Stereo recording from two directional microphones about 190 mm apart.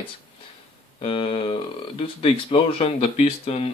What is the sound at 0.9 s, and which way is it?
Speech, 30° left (ahead or behind).